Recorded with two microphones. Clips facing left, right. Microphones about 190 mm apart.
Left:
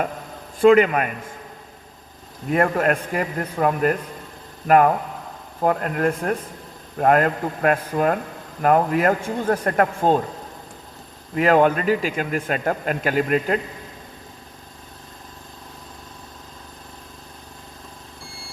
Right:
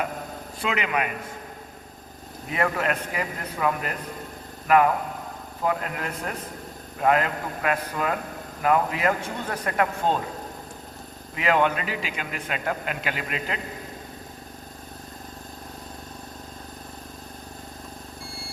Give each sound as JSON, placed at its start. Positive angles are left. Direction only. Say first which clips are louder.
{"t": 0.6, "sound": "a man's voice", "louder": "left 13 dB", "side_deg": 45}
{"t": 2.5, "sound": "a man's voice", "louder": "left 6 dB", "side_deg": 50}
{"t": 11.3, "sound": "a man's voice", "louder": "left 6 dB", "side_deg": 45}